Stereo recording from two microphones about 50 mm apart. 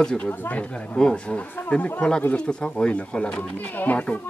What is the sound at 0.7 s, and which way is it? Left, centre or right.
Speech, centre.